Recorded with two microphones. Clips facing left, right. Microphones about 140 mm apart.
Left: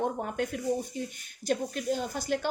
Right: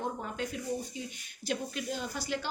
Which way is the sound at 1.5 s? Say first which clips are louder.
Left 6 dB; 45° left (ahead or behind).